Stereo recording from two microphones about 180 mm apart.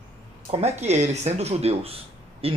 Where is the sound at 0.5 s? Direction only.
35° right (ahead or behind).